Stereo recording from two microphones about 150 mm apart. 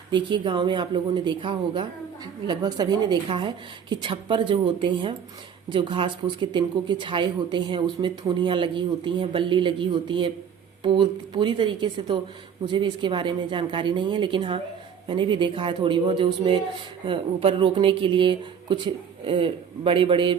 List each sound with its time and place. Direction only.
0.1 s a man's voice: 30° right (ahead or behind)